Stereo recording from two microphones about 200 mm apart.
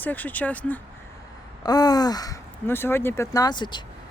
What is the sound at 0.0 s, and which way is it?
Speech, 10° left (ahead or behind).